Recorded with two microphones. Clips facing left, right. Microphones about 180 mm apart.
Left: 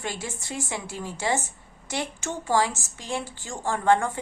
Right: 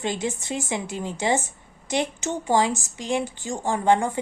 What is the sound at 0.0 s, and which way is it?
A woman's voice, 20° right (ahead or behind).